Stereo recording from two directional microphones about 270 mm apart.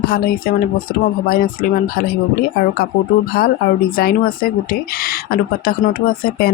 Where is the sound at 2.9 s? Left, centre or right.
Left.